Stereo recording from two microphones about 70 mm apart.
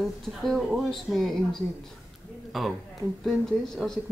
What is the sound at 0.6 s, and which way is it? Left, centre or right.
Speech, centre.